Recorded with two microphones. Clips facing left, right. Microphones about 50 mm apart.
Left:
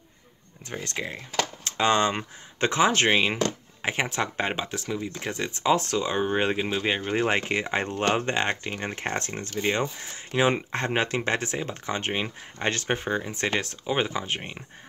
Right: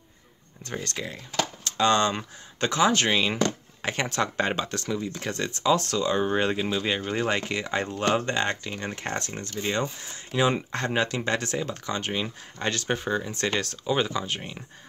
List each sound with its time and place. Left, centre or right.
0.7 s speech: centre
3.8 s speech: centre
5.6 s speech: left